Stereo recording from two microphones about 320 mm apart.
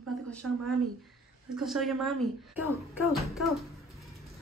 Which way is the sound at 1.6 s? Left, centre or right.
Centre.